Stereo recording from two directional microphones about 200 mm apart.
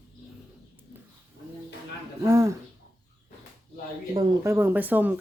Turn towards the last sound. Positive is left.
turn(degrees=-10)  # may be behind; listen again after turning